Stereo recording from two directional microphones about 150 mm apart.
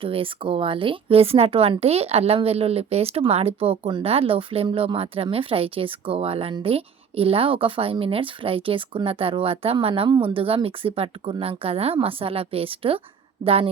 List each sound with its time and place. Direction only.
0.0 s a woman's voice: 35° right (ahead or behind)